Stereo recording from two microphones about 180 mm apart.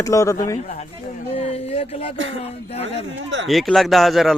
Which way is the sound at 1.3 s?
35° left (ahead or behind).